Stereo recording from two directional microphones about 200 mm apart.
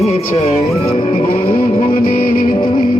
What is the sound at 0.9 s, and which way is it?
Music, 35° left (ahead or behind).